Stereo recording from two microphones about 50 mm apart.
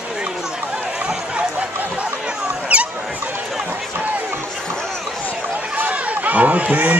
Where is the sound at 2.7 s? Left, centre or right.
Right.